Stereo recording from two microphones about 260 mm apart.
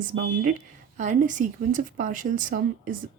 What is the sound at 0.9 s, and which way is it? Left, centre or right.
Speech, right.